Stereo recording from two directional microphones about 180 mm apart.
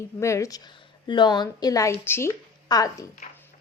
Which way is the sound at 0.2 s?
15° left (ahead or behind).